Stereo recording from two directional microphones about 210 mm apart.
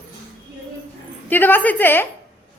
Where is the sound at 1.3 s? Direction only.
10° left (ahead or behind).